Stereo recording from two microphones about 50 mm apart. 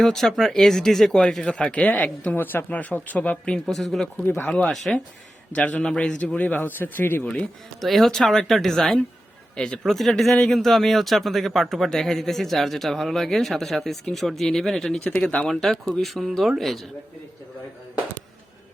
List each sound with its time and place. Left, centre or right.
0.0 s speech: centre
1.7 s speech: left
2.3 s speech: left
3.7 s speech: centre
4.4 s speech: left
7.8 s speech: centre
9.8 s speech: centre
15.0 s speech: left
15.4 s speech: centre